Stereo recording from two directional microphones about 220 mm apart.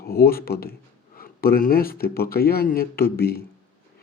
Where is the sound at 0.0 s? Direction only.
45° left (ahead or behind).